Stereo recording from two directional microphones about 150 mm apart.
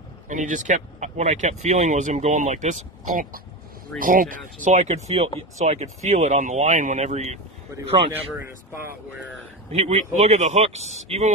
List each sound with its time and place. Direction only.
0.3 s speech: 55° right (ahead or behind)
4.0 s speech: 65° right (ahead or behind)
7.7 s speech: 20° right (ahead or behind)
9.7 s speech: 45° right (ahead or behind)